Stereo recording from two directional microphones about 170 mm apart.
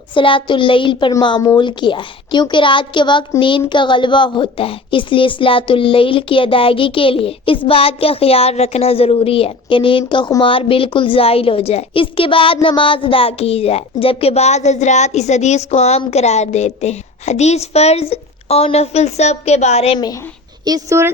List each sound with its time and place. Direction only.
0.1 s a woman's voice: 30° left (ahead or behind)
20.7 s speech: 20° right (ahead or behind)